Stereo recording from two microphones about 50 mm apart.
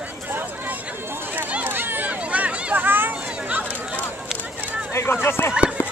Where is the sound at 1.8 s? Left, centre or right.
Right.